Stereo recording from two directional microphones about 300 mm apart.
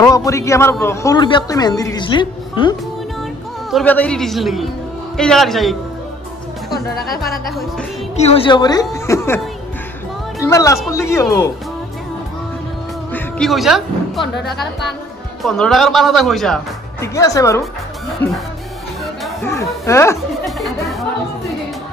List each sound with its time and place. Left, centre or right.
0.1 s a man's voice: centre
3.7 s speech: centre
7.2 s speech: centre
8.2 s a man's voice: centre
10.4 s a man's voice: centre
13.1 s a man's voice: centre
14.2 s speech: left
15.4 s speech: centre